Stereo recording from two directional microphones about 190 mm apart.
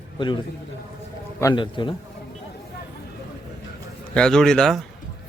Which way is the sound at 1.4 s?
20° left (ahead or behind).